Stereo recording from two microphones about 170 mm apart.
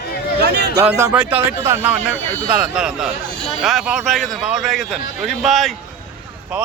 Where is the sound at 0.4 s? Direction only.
80° right.